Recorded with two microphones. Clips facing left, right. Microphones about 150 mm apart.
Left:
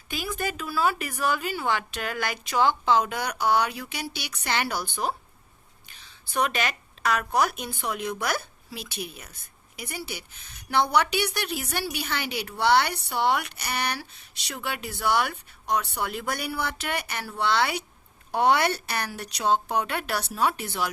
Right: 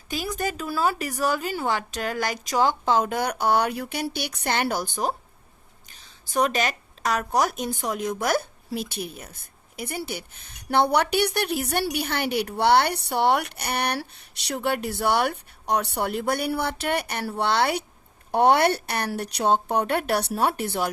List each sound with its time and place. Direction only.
0.1 s a woman's voice: 40° right (ahead or behind)
6.3 s a woman's voice: 40° right (ahead or behind)